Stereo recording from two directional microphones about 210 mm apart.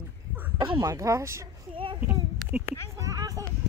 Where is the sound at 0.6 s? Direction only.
20° right (ahead or behind).